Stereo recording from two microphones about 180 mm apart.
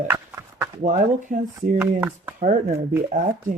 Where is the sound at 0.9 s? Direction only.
45° right (ahead or behind).